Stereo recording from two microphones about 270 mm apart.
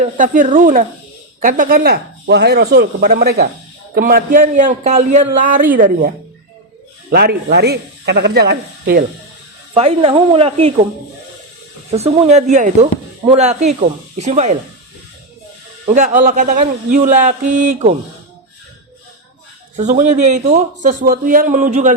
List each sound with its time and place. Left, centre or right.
0.0 s speech: right
7.1 s speech: right
9.7 s speech: right
11.9 s speech: right
15.9 s speech: right
19.7 s speech: right